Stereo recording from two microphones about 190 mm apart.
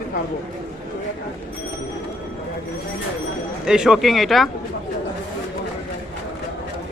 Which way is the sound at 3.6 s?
5° right (ahead or behind).